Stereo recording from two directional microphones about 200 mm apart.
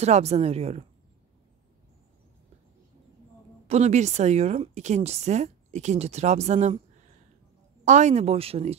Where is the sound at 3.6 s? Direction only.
35° right (ahead or behind).